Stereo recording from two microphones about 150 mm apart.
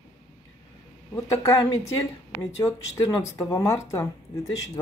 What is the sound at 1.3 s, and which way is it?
Speech, 20° left (ahead or behind).